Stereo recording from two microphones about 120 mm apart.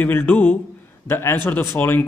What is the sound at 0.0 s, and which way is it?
A man's voice, 15° left (ahead or behind).